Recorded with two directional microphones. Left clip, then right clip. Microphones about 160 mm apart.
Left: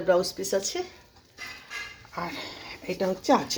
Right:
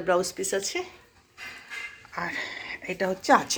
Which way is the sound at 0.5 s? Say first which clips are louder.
Left 2 dB; 15° left (ahead or behind).